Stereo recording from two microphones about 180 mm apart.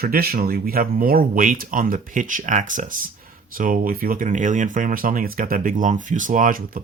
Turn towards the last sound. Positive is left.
turn(degrees=-50)  # may be behind; listen again after turning